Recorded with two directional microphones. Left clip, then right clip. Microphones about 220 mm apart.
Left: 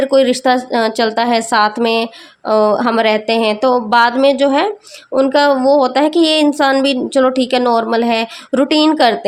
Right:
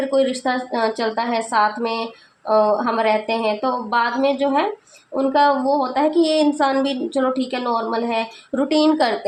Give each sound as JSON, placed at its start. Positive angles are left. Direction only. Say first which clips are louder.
{"t": 0.1, "sound": "speech", "louder": "left 7 dB", "side_deg": 40}